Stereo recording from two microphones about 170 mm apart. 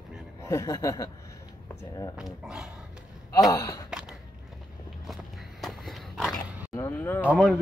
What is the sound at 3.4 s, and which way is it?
Chuckle, 20° left (ahead or behind).